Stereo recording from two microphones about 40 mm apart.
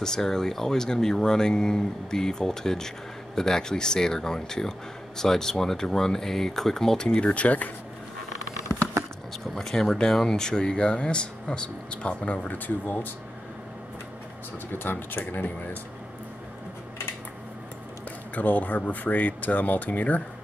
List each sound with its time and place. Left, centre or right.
0.0 s speech: centre; by 7.7 s left
9.6 s speech: centre; by 12.5 s left
12.6 s speech: left
14.7 s speech: left
18.3 s speech: left